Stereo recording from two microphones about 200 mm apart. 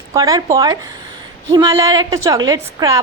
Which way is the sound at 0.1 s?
15° right (ahead or behind).